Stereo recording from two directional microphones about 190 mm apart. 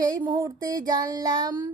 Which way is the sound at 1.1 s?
20° right (ahead or behind).